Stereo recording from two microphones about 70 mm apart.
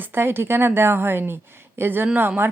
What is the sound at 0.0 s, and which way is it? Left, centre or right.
A woman's voice, right.